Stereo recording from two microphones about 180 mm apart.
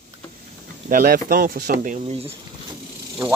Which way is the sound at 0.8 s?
55° right (ahead or behind).